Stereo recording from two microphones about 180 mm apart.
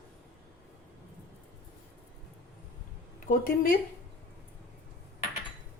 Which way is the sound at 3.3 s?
50° left (ahead or behind).